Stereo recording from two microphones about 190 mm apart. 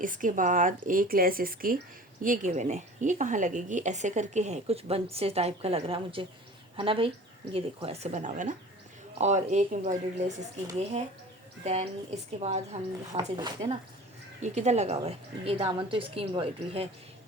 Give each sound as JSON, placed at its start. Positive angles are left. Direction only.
{"t": 0.0, "sound": "a woman's voice", "side_deg": -45}
{"t": 11.6, "sound": "a woman's voice", "side_deg": -35}
{"t": 13.1, "sound": "speech", "side_deg": -20}
{"t": 14.4, "sound": "a woman's voice", "side_deg": -35}